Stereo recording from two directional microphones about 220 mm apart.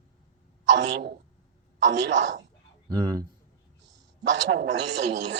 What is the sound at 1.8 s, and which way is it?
Speech, 55° right (ahead or behind).